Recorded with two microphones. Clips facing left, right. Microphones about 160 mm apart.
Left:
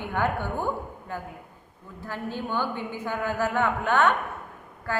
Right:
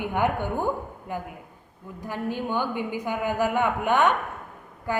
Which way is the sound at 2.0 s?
15° right (ahead or behind).